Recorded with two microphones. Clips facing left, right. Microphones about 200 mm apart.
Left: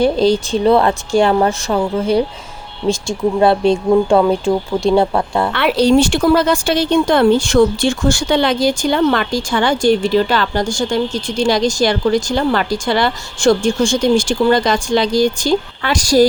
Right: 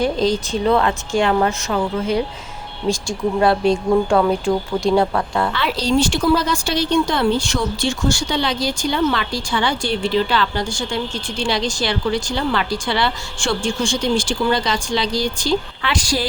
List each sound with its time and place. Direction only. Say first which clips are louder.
0.0 s speech: left 5 dB; 30° left (ahead or behind)
5.5 s a woman's voice: left 8 dB; 60° left (ahead or behind); by 16.2 s 45° left (ahead or behind)